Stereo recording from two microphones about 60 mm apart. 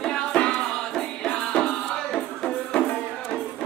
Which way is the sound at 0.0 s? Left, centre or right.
Centre.